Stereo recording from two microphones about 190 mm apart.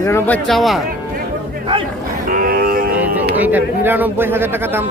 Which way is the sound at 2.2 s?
50° right (ahead or behind).